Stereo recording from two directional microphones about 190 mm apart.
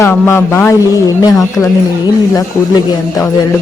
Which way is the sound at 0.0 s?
15° left (ahead or behind).